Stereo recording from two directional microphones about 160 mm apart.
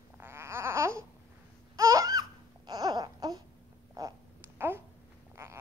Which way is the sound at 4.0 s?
20° right (ahead or behind).